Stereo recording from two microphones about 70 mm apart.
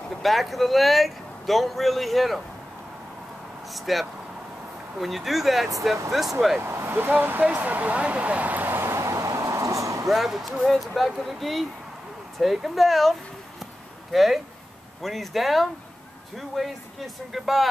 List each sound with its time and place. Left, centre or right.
0.2 s speech: centre
3.7 s speech: centre
6.6 s a sound: right
10.0 s speech: centre
14.1 s speech: centre